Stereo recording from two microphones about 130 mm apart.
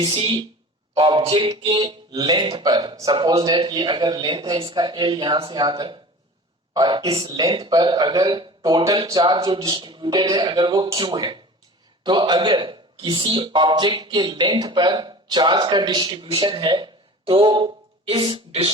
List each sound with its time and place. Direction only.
0.0 s a man's voice: 40° right (ahead or behind)
4.5 s a man's voice: 40° right (ahead or behind)